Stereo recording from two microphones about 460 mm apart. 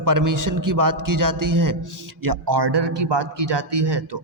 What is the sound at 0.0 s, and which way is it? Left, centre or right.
A man's voice, right.